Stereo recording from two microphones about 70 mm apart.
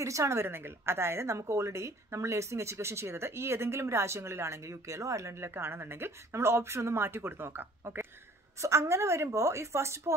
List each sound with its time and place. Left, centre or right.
0.0 s a woman's voice: right
5.5 s a woman's voice: right